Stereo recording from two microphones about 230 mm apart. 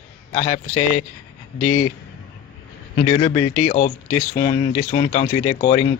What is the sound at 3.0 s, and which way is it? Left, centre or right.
A man's voice, left.